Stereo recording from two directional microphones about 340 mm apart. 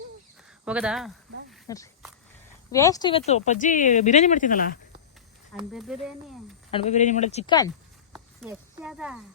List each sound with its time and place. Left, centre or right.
0.6 s speech: centre
1.6 s speech: centre
5.7 s speech: centre
6.7 s speech: centre
8.1 s a sound: centre